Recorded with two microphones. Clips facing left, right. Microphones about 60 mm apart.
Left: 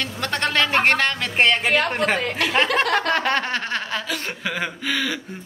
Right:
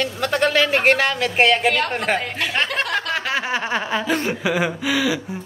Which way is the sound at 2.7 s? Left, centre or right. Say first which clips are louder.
Left 3 dB; left.